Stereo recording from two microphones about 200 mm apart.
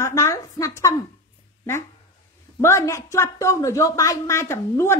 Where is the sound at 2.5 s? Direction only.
15° left (ahead or behind).